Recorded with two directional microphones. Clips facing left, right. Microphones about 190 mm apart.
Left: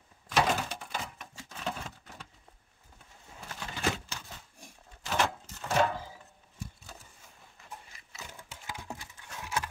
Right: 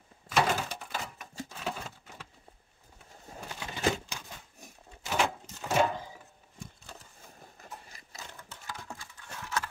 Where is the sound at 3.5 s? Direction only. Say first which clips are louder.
Right 3 dB; 15° right (ahead or behind).